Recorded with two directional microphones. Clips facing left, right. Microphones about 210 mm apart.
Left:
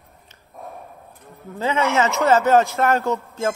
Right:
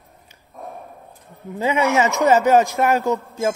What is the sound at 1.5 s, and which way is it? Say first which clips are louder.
A man's voice: right 2 dB; 15° right (ahead or behind).